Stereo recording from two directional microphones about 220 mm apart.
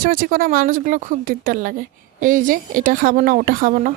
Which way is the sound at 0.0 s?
40° right (ahead or behind).